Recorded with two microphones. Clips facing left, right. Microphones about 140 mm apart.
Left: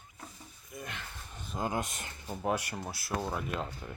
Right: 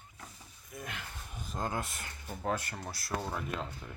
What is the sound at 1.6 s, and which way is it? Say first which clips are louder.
Speech: left 3 dB; 15° left (ahead or behind).